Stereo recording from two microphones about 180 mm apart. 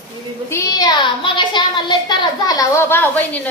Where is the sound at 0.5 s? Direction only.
20° left (ahead or behind).